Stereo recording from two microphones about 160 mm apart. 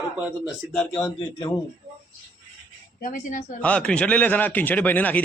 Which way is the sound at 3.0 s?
55° left (ahead or behind).